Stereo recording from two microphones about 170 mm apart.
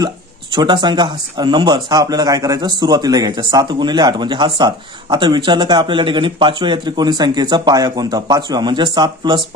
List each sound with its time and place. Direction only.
0.6 s speech: 25° right (ahead or behind)